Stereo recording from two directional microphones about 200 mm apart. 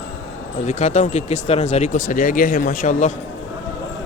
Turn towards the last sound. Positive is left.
turn(degrees=40)  # may be behind; listen again after turning